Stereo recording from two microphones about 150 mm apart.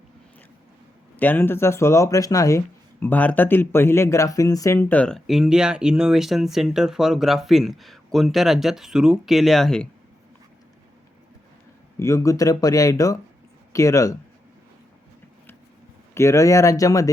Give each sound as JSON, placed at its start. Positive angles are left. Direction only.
{"t": 1.1, "sound": "speech", "side_deg": 10}
{"t": 11.9, "sound": "speech", "side_deg": 20}
{"t": 16.1, "sound": "speech", "side_deg": 20}